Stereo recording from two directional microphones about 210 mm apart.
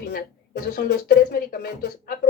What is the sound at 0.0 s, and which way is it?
Speech, 50° left (ahead or behind).